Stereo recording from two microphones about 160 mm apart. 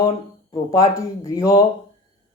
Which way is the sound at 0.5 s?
20° left (ahead or behind).